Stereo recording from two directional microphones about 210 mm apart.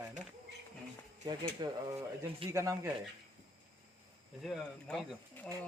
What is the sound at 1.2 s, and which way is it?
Speech, 15° right (ahead or behind).